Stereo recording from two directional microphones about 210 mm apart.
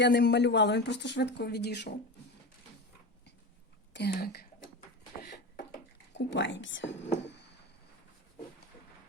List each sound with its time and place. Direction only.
0.0 s speech: 55° left (ahead or behind)
3.9 s speech: 50° left (ahead or behind)
6.1 s speech: 60° left (ahead or behind)
7.2 s a sound: 55° left (ahead or behind)